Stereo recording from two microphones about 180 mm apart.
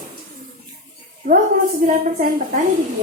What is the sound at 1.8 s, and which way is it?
Speech, 45° right (ahead or behind).